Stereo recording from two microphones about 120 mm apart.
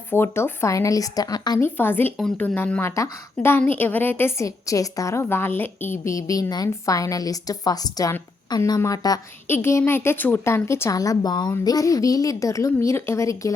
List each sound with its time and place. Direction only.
0.1 s a woman's voice: 20° left (ahead or behind)
1.5 s a woman's voice: 20° left (ahead or behind)
9.5 s a woman's voice: 20° left (ahead or behind)